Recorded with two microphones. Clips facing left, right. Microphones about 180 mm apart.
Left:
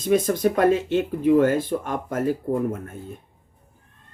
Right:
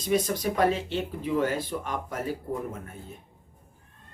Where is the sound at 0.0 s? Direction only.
50° left (ahead or behind).